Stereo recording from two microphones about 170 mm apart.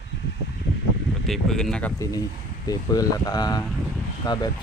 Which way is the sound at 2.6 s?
20° left (ahead or behind).